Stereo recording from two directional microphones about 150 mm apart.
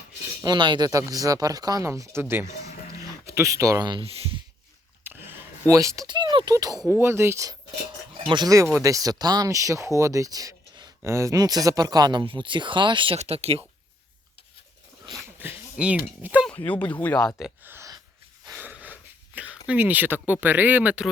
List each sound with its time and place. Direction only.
0.4 s speech: 30° right (ahead or behind)
5.0 s a sound: 15° right (ahead or behind)
6.1 s speech: 30° right (ahead or behind)
15.4 s speech: 10° right (ahead or behind)
16.5 s speech: 10° left (ahead or behind)
17.6 s a sound: 15° right (ahead or behind)